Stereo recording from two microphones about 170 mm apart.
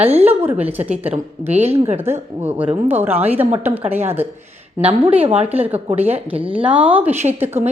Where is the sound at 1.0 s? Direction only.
35° right (ahead or behind).